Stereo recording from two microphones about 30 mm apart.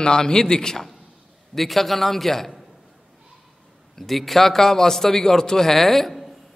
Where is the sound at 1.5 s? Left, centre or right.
Centre.